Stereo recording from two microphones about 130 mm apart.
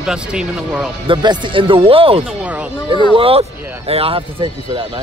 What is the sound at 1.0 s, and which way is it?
Speech, 35° right (ahead or behind).